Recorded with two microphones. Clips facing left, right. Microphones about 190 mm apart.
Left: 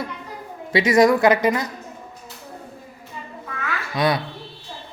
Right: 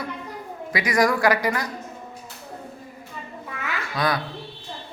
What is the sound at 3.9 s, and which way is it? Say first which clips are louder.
Speech: left 4 dB; 20° left (ahead or behind).